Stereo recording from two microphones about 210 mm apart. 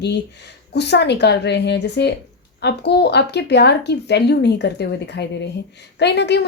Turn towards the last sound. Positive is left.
turn(degrees=55)  # may be behind; listen again after turning